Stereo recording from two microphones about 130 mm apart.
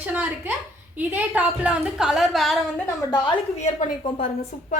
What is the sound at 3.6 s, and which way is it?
Speech, 60° left (ahead or behind).